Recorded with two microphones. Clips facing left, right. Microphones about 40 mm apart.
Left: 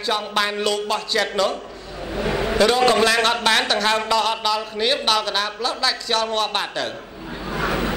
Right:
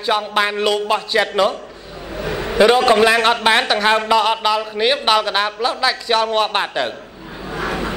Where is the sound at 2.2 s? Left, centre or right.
Left.